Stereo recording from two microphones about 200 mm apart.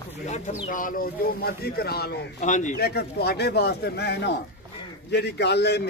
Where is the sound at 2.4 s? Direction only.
40° left (ahead or behind).